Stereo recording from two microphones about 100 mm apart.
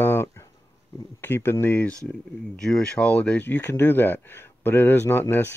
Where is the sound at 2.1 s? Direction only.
5° left (ahead or behind).